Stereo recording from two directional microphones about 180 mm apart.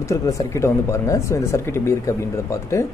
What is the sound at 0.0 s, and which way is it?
Speech, 15° left (ahead or behind).